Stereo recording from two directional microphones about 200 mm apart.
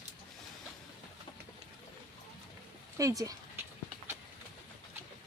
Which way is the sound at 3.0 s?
15° right (ahead or behind).